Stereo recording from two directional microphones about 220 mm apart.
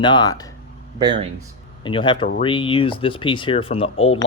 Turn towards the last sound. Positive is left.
turn(degrees=25)  # may be behind; listen again after turning